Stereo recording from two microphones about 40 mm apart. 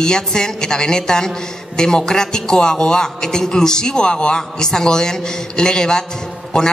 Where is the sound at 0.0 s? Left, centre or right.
Centre.